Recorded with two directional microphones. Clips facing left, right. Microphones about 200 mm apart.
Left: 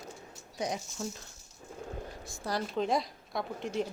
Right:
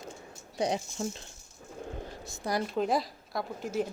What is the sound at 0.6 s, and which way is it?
Speech, 30° right (ahead or behind).